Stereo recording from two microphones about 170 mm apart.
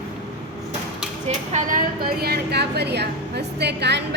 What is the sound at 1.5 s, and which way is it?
A woman's voice, 50° right (ahead or behind).